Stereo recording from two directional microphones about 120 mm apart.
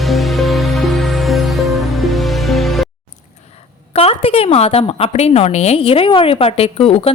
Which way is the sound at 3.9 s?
55° left (ahead or behind).